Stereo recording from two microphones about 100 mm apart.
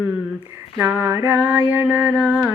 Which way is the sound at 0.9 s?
20° right (ahead or behind).